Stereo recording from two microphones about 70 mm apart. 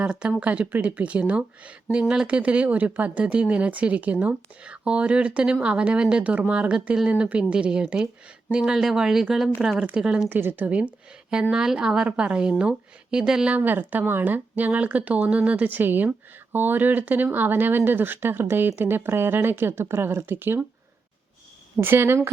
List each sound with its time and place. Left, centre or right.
0.0 s speech: centre
10.2 s speech: right; by 13.5 s centre
13.5 s speech: right
21.8 s speech: right